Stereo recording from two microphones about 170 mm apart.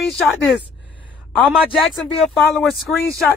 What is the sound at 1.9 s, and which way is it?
Speech, centre (ahead or behind).